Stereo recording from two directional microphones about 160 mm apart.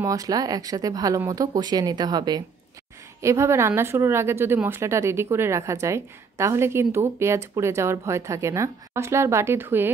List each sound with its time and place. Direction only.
0.0 s speech: 20° right (ahead or behind)